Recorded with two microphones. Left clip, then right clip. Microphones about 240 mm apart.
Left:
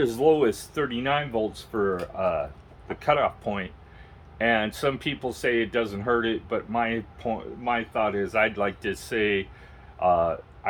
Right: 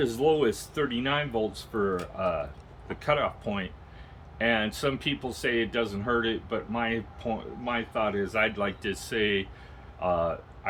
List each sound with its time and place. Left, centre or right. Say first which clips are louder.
0.0 s speech: left 3 dB; centre